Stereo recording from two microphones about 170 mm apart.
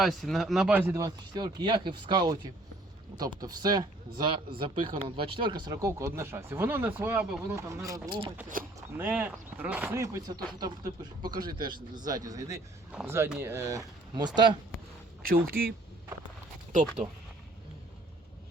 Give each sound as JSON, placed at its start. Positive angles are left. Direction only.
{"t": 0.0, "sound": "speech", "side_deg": 0}
{"t": 8.5, "sound": "speech", "side_deg": -55}
{"t": 9.0, "sound": "speech", "side_deg": -10}
{"t": 15.4, "sound": "speech", "side_deg": -60}